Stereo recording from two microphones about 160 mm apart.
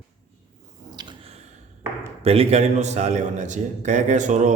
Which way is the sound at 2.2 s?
40° right (ahead or behind).